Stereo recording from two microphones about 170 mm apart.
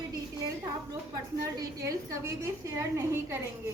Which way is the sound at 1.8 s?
20° right (ahead or behind).